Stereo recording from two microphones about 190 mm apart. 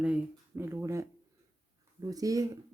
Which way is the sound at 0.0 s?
10° right (ahead or behind).